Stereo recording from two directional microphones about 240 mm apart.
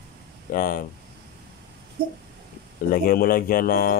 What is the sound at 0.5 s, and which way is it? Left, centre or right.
Speech, left.